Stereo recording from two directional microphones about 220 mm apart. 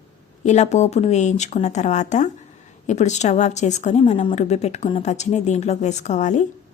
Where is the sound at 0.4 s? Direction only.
30° left (ahead or behind).